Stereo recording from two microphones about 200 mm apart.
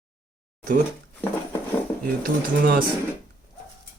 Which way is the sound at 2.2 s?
45° right (ahead or behind).